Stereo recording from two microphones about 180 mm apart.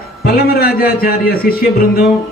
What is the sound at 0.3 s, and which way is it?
A man's voice, 55° left (ahead or behind).